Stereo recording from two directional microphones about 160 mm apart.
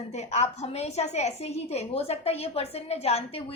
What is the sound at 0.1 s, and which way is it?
A woman's voice, 45° left (ahead or behind).